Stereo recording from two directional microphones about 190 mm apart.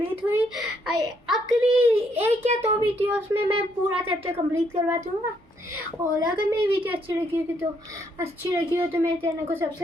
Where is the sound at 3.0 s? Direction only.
10° right (ahead or behind).